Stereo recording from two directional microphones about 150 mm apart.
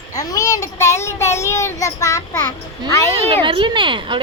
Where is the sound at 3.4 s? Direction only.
30° right (ahead or behind).